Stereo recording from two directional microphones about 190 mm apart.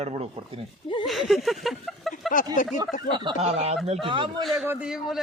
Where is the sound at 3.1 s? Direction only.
25° right (ahead or behind).